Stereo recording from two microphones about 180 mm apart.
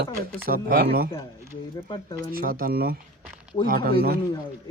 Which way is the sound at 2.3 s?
55° right (ahead or behind).